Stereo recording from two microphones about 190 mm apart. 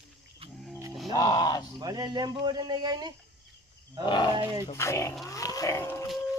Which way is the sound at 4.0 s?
25° left (ahead or behind).